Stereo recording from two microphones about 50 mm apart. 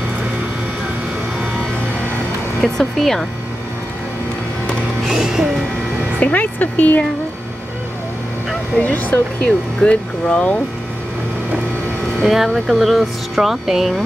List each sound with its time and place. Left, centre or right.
2.6 s speech: centre
5.0 s music: centre
6.1 s speech: left
8.7 s speech: left
12.2 s speech: centre